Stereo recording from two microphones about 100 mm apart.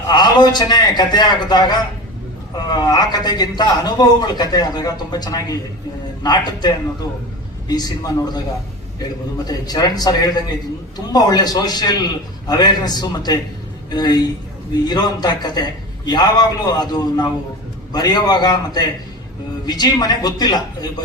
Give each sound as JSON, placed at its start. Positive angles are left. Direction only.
{"t": 0.1, "sound": "a man's voice", "side_deg": 45}
{"t": 9.5, "sound": "a man's voice", "side_deg": 40}